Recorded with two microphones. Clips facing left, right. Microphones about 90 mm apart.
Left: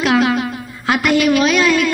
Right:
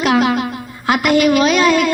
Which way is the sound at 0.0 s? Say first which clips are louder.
Even; 55° right (ahead or behind).